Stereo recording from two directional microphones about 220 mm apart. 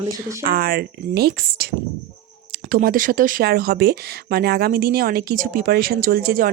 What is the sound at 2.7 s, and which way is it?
Speech, 40° right (ahead or behind).